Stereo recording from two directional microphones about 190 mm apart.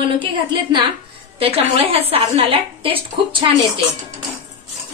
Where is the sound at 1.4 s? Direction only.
30° right (ahead or behind).